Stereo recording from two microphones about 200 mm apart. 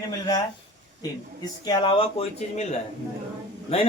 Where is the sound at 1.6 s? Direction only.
20° left (ahead or behind).